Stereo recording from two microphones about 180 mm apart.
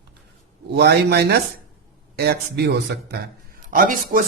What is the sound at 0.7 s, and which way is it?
A man's voice, 65° right (ahead or behind).